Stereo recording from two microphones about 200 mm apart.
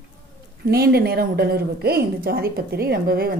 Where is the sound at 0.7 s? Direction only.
50° right (ahead or behind).